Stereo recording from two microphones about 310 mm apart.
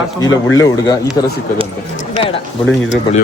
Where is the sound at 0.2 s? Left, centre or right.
Centre.